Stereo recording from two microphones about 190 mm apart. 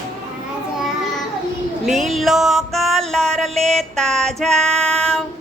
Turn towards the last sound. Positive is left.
turn(degrees=5)  # may be behind; listen again after turning